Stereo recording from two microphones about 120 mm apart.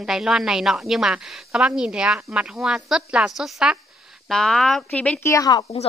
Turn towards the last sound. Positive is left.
turn(degrees=30)  # may be behind; listen again after turning